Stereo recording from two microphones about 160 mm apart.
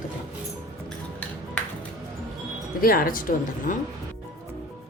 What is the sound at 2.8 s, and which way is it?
A woman's voice, 65° left (ahead or behind).